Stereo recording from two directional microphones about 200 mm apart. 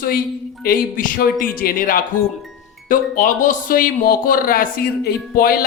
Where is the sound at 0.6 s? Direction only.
45° left (ahead or behind).